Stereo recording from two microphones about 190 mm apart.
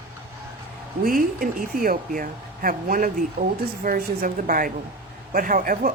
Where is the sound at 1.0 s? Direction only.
45° right (ahead or behind).